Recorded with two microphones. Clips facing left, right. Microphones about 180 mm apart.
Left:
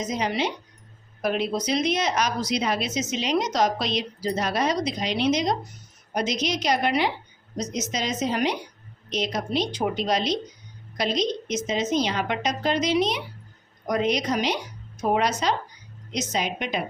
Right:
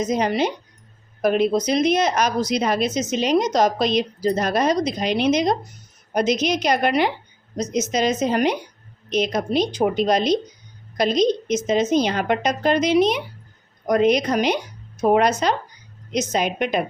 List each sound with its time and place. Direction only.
0.0 s speech: 50° right (ahead or behind)